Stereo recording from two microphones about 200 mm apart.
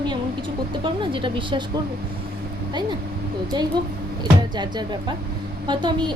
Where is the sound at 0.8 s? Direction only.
25° right (ahead or behind).